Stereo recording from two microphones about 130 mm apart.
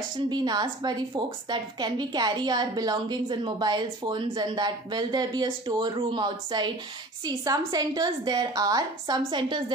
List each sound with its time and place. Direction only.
0.3 s a woman's voice: 35° right (ahead or behind)